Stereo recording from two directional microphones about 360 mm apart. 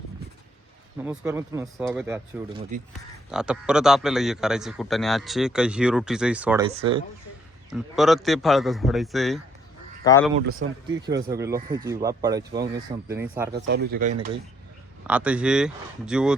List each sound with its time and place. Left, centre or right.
0.9 s a man's voice: centre
7.7 s a man's voice: centre
10.4 s speech: right
11.3 s speech: centre
13.5 s speech: right
15.0 s a man's voice: centre